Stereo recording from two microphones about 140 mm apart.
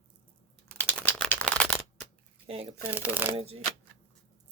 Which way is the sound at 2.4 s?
45° right (ahead or behind).